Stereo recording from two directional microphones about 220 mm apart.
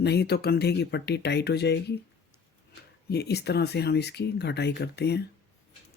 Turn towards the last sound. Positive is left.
turn(degrees=50)  # may be behind; listen again after turning